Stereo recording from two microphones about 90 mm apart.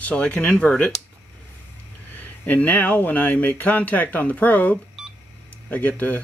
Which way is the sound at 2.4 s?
20° left (ahead or behind).